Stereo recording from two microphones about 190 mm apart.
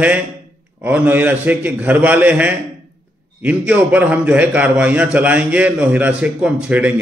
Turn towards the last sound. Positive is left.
turn(degrees=-10)  # may be behind; listen again after turning